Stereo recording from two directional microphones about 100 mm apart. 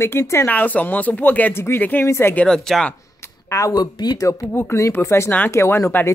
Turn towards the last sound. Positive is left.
turn(degrees=25)  # may be behind; listen again after turning